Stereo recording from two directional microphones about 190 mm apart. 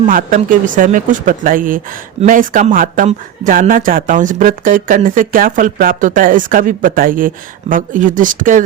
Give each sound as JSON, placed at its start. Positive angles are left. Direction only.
{"t": 0.1, "sound": "speech", "side_deg": -45}